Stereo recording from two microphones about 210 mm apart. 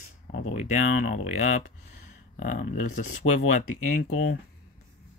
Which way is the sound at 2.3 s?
40° left (ahead or behind).